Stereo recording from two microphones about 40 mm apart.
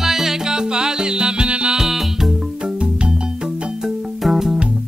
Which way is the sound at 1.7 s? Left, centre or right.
Centre.